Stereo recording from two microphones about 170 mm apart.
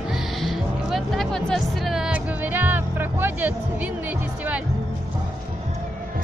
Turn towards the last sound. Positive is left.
turn(degrees=-10)  # may be behind; listen again after turning